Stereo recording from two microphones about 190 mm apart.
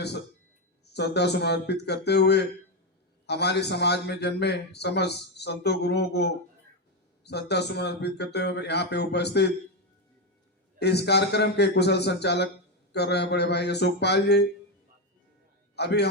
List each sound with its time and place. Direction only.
0.9 s a man's voice: 60° left (ahead or behind)
10.8 s a man's voice: 60° left (ahead or behind)
15.7 s a man's voice: 60° left (ahead or behind)